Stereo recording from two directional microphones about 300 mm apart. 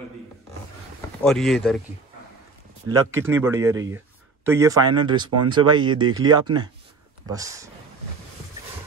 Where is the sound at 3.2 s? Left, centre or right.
Centre.